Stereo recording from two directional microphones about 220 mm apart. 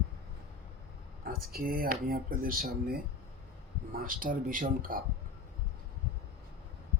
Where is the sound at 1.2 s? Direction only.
40° right (ahead or behind).